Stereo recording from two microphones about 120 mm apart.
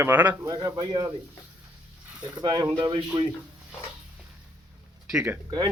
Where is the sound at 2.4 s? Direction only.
30° right (ahead or behind).